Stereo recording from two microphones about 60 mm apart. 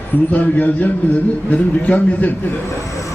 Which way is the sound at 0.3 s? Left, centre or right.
Left.